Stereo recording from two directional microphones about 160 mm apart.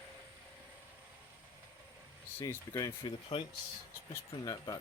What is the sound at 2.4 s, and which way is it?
Speech, 20° left (ahead or behind).